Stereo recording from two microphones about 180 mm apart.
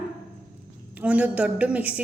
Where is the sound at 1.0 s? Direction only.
5° right (ahead or behind).